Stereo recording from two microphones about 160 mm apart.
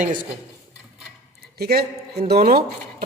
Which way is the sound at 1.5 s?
80° right.